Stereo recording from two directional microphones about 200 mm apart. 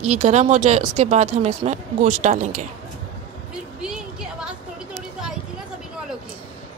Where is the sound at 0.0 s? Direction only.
35° right (ahead or behind).